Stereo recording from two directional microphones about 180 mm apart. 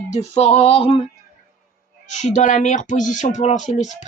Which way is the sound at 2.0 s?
45° left (ahead or behind).